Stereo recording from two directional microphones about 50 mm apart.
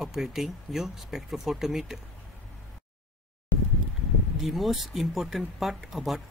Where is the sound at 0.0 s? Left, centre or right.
Centre.